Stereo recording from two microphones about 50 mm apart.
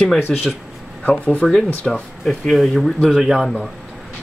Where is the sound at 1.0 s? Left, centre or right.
Left.